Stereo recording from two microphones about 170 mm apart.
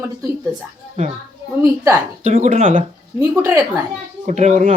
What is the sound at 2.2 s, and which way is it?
Speech, 45° right (ahead or behind).